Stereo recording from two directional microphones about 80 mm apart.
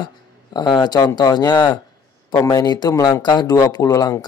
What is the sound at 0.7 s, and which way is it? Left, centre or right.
Speech, left.